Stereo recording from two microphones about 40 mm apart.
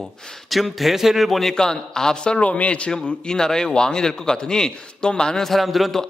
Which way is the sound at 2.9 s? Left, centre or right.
Centre.